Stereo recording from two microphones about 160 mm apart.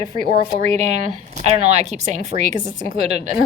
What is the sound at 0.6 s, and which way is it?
A woman's voice, 45° right (ahead or behind).